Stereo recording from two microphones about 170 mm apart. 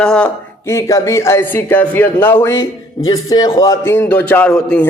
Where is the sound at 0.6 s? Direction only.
15° left (ahead or behind).